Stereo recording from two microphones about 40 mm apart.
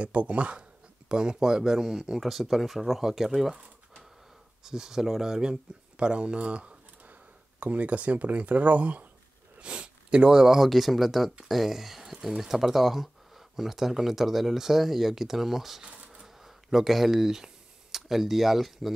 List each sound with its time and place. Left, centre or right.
0.0 s speech: right; by 3.3 s centre
4.6 s speech: centre
5.4 s speech: right
9.6 s speech: right
10.7 s speech: centre
15.8 s bee: right
16.4 s speech: centre